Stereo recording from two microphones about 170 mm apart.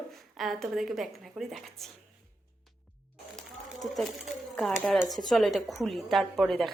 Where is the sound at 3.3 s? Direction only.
Centre (ahead or behind).